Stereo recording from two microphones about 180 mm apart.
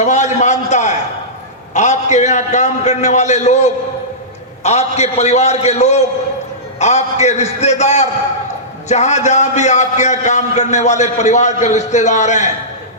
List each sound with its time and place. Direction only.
0.0 s a man's voice: 40° left (ahead or behind)